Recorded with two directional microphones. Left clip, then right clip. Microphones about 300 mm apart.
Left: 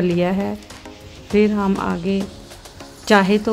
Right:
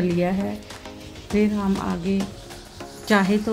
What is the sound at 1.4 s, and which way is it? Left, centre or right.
Speech, left.